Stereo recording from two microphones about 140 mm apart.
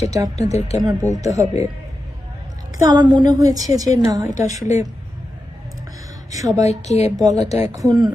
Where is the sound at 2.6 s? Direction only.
25° right (ahead or behind).